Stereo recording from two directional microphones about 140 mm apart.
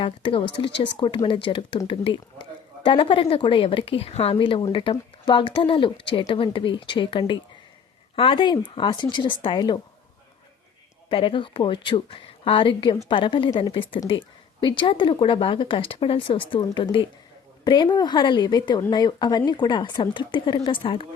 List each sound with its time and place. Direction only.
0.0 s a woman's voice: 40° left (ahead or behind)
11.1 s a woman's voice: 35° left (ahead or behind)